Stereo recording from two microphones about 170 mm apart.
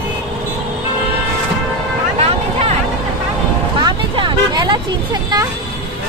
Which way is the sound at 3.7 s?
30° right (ahead or behind).